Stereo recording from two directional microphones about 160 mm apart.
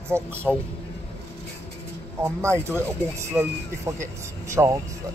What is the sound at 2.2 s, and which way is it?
Speech, 15° right (ahead or behind).